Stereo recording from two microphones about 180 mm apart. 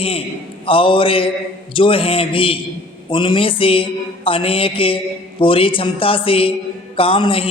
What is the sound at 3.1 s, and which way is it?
Speech, 25° left (ahead or behind).